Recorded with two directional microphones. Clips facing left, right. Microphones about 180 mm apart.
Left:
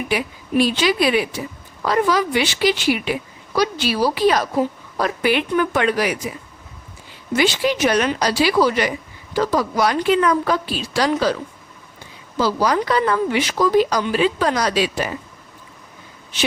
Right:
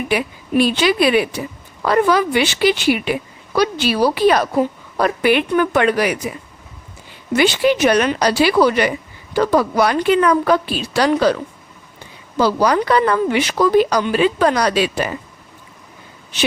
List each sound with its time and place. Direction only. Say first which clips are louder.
0.1 s a woman's voice: right 2 dB; 60° right (ahead or behind)
7.3 s a woman's voice: right 4 dB; 60° right (ahead or behind)
12.4 s a woman's voice: right 3 dB; 60° right (ahead or behind)